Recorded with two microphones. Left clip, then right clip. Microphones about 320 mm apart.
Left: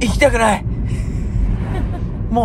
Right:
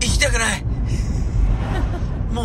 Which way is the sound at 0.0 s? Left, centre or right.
Centre.